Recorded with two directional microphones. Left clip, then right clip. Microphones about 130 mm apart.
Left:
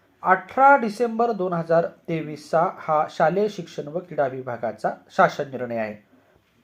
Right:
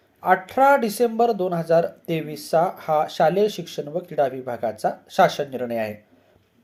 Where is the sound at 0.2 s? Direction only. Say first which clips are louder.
Even; 20° right (ahead or behind).